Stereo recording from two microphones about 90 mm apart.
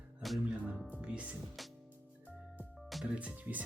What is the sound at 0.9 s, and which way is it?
Music, 10° right (ahead or behind).